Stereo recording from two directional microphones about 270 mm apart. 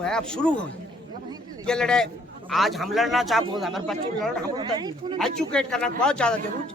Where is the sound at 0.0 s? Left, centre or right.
Centre.